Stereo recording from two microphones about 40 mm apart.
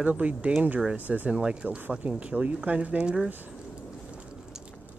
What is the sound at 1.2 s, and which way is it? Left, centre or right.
Speech, right.